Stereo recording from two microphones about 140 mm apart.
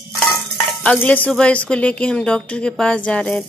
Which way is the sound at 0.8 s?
10° left (ahead or behind).